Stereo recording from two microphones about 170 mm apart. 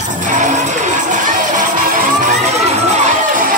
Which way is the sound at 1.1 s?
50° right (ahead or behind).